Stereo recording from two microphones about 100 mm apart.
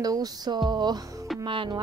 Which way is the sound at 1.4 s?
55° right (ahead or behind).